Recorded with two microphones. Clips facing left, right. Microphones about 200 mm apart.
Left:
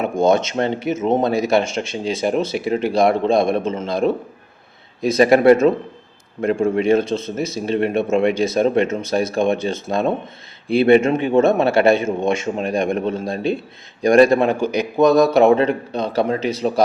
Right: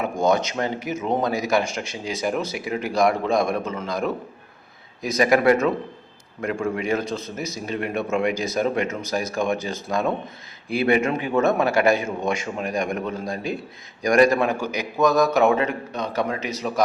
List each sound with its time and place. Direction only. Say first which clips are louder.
0.0 s speech: left 5 dB; 25° left (ahead or behind)